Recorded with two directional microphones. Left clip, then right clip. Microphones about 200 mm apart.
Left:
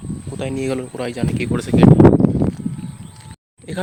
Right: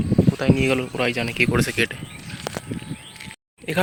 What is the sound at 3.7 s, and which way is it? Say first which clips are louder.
Speech: right 5 dB; 5° right (ahead or behind).